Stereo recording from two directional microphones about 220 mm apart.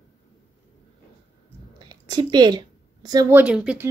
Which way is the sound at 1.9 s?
20° right (ahead or behind).